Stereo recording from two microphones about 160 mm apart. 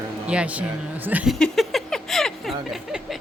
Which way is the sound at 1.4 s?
Centre (ahead or behind).